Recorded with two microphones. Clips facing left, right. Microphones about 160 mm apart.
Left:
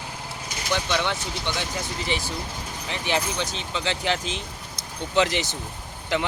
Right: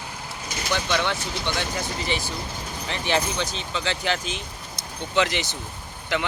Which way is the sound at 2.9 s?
15° left (ahead or behind).